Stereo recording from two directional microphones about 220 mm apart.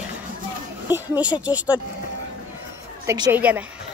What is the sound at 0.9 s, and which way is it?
Speech, 5° right (ahead or behind).